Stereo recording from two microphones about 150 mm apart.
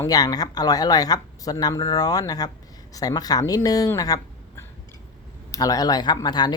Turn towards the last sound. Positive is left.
turn(degrees=30)  # may be behind; listen again after turning